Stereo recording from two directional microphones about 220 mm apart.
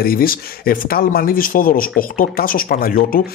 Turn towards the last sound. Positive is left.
turn(degrees=40)  # may be behind; listen again after turning